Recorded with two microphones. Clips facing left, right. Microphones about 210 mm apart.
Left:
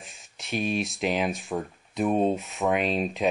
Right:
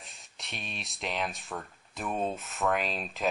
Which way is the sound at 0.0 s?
Centre (ahead or behind).